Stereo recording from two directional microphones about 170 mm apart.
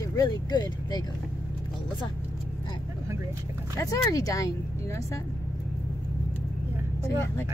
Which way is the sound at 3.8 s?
20° left (ahead or behind).